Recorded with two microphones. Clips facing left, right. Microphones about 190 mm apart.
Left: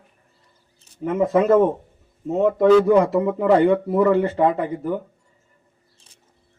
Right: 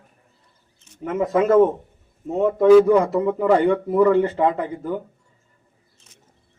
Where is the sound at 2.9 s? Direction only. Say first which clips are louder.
Left 1 dB; 15° left (ahead or behind).